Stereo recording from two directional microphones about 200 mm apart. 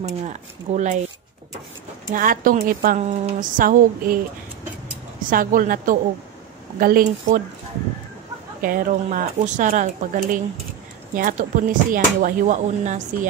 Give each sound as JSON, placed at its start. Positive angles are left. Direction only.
{"t": 0.2, "sound": "speech", "side_deg": -35}
{"t": 2.1, "sound": "a woman's voice", "side_deg": -45}
{"t": 5.3, "sound": "a woman's voice", "side_deg": -45}
{"t": 8.5, "sound": "a woman's voice", "side_deg": -45}